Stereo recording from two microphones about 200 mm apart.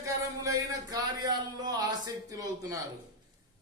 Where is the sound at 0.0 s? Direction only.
15° right (ahead or behind).